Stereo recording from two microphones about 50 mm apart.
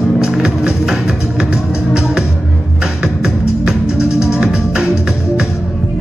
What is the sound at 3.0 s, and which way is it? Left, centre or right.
Music, centre.